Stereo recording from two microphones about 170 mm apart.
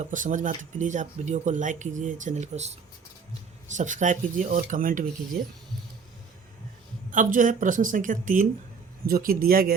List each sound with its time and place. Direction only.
0.0 s speech: 50° right (ahead or behind)
7.1 s speech: 50° right (ahead or behind)